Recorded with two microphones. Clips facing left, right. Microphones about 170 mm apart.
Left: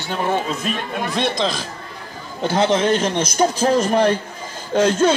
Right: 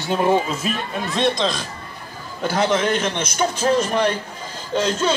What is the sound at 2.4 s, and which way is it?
A man's voice, 30° left (ahead or behind).